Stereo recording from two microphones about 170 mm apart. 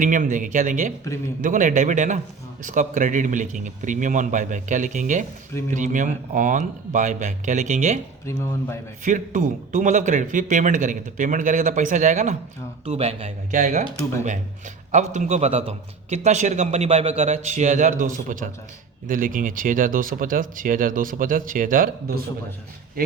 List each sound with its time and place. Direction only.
0.0 s a man's voice: 50° right (ahead or behind)
8.3 s speech: 15° left (ahead or behind)
9.0 s a man's voice: 50° right (ahead or behind)
13.5 s a man's voice: 55° right (ahead or behind)
14.9 s a man's voice: 45° right (ahead or behind)